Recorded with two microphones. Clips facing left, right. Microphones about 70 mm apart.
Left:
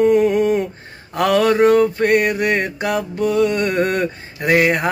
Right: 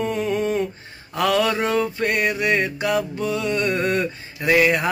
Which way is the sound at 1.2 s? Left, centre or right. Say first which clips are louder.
Left 6 dB; left.